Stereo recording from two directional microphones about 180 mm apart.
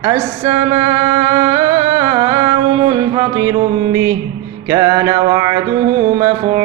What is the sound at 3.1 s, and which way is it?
Mantra, 15° right (ahead or behind).